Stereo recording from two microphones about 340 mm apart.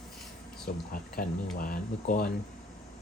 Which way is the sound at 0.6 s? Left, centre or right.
Left.